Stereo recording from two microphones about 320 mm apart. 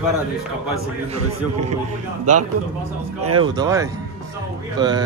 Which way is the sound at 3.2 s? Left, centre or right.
Right.